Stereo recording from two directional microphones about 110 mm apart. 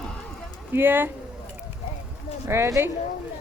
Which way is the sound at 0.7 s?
20° right (ahead or behind).